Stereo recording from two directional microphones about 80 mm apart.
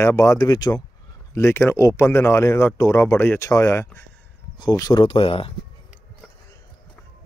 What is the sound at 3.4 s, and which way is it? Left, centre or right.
Speech, left.